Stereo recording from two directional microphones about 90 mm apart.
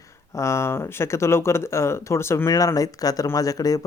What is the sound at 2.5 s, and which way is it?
Speech, 40° left (ahead or behind).